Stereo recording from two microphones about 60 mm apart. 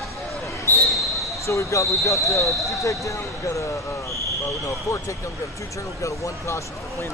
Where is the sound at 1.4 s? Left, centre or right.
Left.